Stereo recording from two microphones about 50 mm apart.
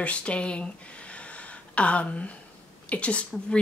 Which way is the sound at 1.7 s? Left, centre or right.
Left.